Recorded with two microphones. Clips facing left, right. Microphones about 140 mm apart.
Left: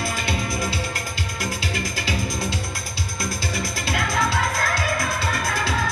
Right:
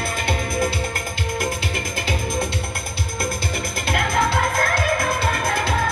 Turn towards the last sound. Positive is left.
turn(degrees=-55)  # may be behind; listen again after turning